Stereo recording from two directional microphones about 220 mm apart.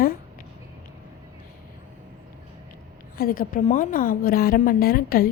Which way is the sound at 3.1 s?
40° left (ahead or behind).